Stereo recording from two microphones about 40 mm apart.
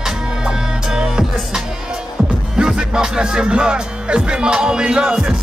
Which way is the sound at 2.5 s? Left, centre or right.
Centre.